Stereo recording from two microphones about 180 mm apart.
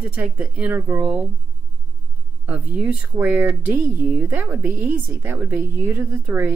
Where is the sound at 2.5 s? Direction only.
10° right (ahead or behind).